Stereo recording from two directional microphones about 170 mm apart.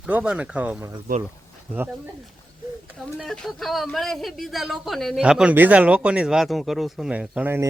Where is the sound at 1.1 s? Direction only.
60° right (ahead or behind).